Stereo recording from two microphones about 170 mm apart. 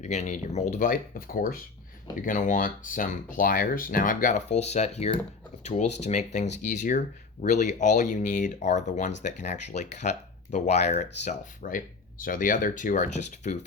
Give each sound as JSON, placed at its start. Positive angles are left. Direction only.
{"t": 0.0, "sound": "speech", "side_deg": 40}